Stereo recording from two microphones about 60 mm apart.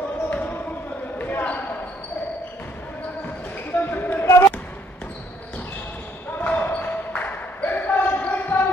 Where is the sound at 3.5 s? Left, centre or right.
Left.